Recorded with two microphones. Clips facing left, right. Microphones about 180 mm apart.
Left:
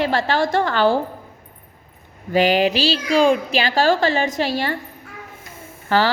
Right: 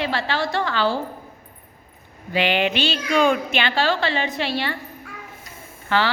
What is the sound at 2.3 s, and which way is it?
Speech, 40° left (ahead or behind).